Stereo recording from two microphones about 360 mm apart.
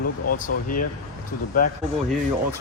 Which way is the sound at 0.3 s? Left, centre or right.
Left.